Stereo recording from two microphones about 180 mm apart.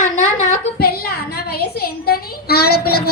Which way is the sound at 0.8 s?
60° left (ahead or behind).